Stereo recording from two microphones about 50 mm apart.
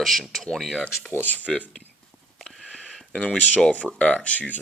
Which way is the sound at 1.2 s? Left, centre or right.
Left.